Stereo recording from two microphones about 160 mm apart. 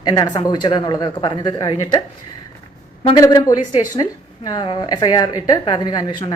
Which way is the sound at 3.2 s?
20° left (ahead or behind).